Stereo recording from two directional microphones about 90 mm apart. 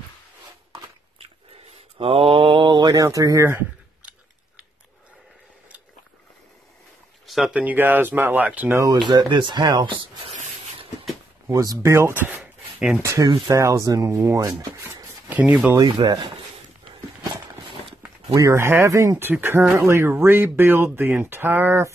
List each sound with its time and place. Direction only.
2.0 s mantra: 90° right; by 3.1 s 50° right (ahead or behind)
3.1 s speech: 35° right (ahead or behind)
7.2 s a sound: centre (ahead or behind)
7.5 s speech: 20° right (ahead or behind)
8.9 s speech: 60° right (ahead or behind)
11.4 s speech: 35° right (ahead or behind)
12.1 s a sound: 20° right (ahead or behind)
13.0 s speech: 35° right (ahead or behind)
15.2 s speech: 15° right (ahead or behind)
16.0 s speech: 60° right (ahead or behind)
18.3 s speech: 35° right (ahead or behind)